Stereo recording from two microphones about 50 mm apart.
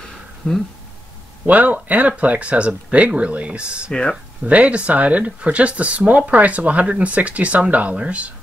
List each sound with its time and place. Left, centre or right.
0.4 s speech: left
1.4 s speech: right